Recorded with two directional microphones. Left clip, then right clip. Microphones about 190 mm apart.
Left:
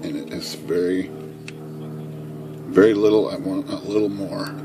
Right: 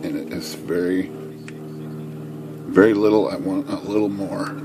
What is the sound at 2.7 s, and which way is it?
A man's voice, 20° right (ahead or behind).